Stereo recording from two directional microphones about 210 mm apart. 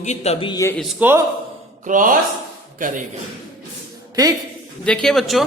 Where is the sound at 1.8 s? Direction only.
40° right (ahead or behind).